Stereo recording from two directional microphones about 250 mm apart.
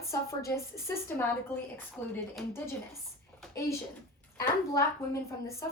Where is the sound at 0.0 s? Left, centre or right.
Centre.